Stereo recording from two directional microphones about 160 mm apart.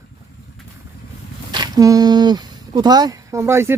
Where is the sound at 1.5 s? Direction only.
25° right (ahead or behind).